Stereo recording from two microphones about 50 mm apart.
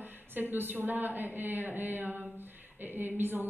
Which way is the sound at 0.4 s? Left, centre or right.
Right.